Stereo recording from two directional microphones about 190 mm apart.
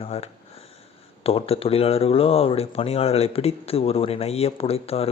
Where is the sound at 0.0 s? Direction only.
35° left (ahead or behind).